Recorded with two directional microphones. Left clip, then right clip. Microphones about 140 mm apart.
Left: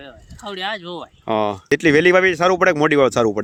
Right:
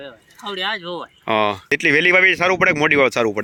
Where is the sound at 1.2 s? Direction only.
30° left (ahead or behind).